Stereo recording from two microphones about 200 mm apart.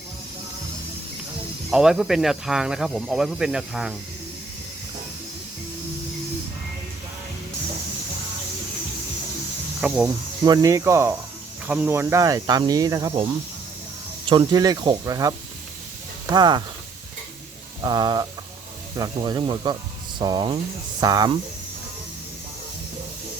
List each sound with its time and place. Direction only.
1.7 s speech: 5° right (ahead or behind)
9.8 s speech: 5° right (ahead or behind)
14.3 s speech: 20° right (ahead or behind)
17.8 s speech: 20° right (ahead or behind)